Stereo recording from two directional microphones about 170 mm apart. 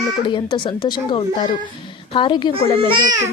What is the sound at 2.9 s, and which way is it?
Speech, 20° right (ahead or behind).